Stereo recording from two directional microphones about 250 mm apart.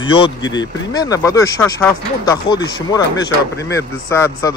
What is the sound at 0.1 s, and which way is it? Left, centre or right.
Speech, centre.